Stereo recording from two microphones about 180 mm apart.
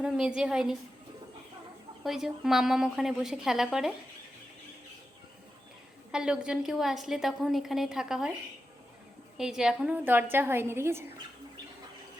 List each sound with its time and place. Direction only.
0.0 s a woman's voice: 5° right (ahead or behind)
2.0 s a woman's voice: centre (ahead or behind)
6.1 s a woman's voice: 5° right (ahead or behind)
9.4 s a woman's voice: 5° right (ahead or behind)